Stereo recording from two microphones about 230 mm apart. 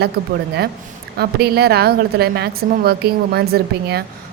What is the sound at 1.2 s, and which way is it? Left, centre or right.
A woman's voice, right.